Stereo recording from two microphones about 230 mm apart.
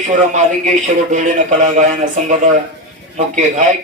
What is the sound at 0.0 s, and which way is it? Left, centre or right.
A man's voice, right.